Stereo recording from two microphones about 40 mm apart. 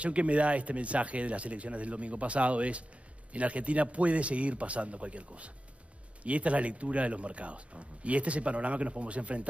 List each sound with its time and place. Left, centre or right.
0.0 s speech: right